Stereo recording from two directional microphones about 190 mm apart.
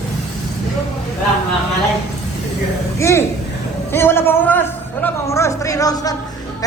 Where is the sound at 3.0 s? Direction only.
15° left (ahead or behind).